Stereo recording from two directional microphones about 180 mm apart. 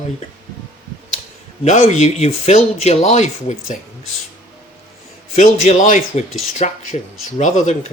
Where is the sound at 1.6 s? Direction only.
40° left (ahead or behind).